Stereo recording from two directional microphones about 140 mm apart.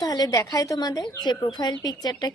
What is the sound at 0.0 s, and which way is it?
A woman's voice, 30° left (ahead or behind).